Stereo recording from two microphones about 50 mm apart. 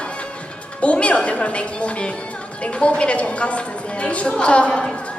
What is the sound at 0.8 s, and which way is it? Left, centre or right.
A woman's voice, left.